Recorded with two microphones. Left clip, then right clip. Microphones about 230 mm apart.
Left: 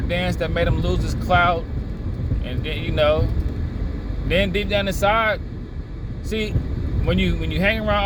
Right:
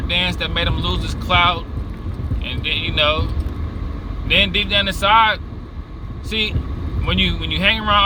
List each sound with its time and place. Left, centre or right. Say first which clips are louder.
0.1 s speech: right 4 dB; right
4.3 s speech: right 5 dB; right
7.1 s speech: right 5 dB; right